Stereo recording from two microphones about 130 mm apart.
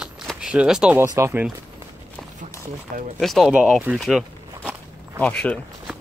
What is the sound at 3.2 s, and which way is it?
Speech, centre (ahead or behind).